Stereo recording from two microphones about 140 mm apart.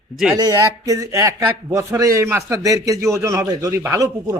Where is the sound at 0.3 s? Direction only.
25° right (ahead or behind).